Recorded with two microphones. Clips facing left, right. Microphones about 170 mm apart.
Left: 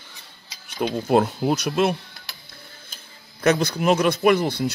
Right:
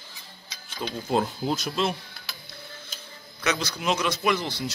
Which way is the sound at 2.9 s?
50° left (ahead or behind).